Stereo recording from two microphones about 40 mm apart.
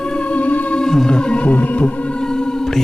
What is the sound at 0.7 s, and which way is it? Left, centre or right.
Music, centre.